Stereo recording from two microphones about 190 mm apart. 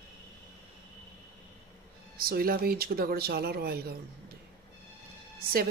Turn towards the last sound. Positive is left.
turn(degrees=-50)  # may be behind; listen again after turning